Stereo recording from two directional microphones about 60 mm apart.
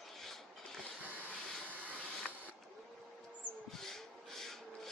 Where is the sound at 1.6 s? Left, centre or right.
Right.